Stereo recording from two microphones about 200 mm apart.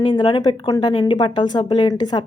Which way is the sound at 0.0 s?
25° left (ahead or behind).